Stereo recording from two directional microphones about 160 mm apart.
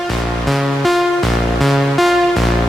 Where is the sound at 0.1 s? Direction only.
Centre (ahead or behind).